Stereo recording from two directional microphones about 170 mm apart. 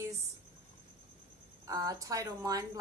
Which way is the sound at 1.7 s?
20° right (ahead or behind).